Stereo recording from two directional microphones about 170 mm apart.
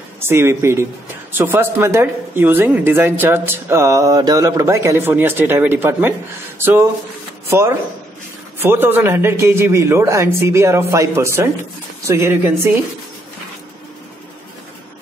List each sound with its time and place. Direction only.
0.2 s speech: 15° right (ahead or behind)